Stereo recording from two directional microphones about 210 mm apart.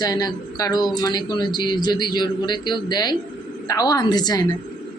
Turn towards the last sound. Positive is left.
turn(degrees=20)  # may be behind; listen again after turning